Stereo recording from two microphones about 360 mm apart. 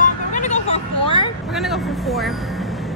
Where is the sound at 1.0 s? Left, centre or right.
Centre.